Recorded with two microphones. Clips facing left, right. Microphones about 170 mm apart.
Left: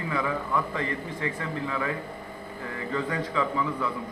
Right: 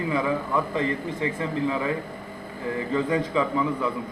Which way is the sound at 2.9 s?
20° right (ahead or behind).